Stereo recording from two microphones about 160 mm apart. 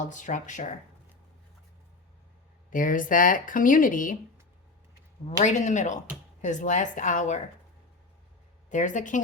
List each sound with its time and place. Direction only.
0.0 s speech: 50° left (ahead or behind)
2.6 s speech: 55° left (ahead or behind)
5.4 s speech: 50° left (ahead or behind)
8.7 s speech: 50° left (ahead or behind)